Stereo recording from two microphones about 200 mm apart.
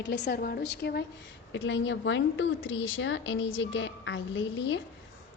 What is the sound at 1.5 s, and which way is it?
A woman's voice, 65° left (ahead or behind).